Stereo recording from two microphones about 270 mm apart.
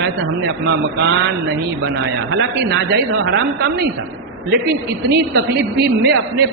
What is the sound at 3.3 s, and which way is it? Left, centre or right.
Speech, right.